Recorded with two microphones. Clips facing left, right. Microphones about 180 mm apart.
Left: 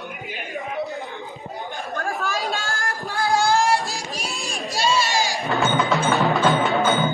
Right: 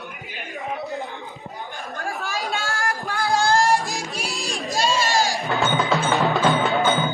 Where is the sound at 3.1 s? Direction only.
20° left (ahead or behind).